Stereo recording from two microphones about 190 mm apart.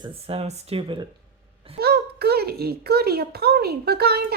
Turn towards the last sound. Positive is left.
turn(degrees=-55)  # may be behind; listen again after turning